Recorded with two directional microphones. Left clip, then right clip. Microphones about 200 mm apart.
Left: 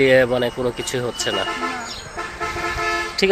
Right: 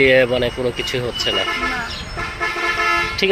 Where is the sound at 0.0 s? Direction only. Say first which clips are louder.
Right 1 dB; 5° left (ahead or behind).